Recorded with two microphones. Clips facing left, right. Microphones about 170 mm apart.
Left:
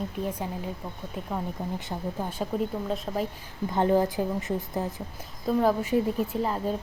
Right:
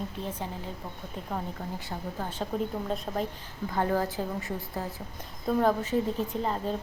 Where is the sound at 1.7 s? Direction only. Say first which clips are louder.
Left 3 dB; 20° left (ahead or behind).